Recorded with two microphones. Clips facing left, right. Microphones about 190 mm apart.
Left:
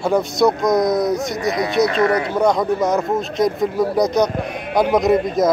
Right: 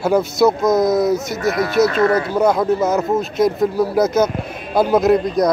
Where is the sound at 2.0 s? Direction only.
20° left (ahead or behind).